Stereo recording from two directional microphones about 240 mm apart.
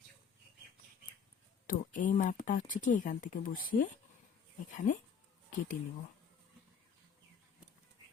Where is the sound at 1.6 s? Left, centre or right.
Left.